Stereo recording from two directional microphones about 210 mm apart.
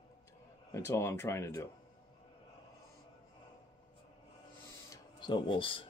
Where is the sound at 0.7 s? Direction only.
10° left (ahead or behind).